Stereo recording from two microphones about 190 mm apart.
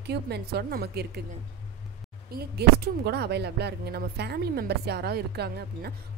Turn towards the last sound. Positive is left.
turn(degrees=-60)  # may be behind; listen again after turning